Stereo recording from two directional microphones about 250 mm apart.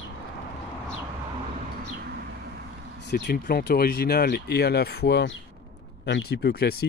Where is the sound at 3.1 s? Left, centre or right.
Left.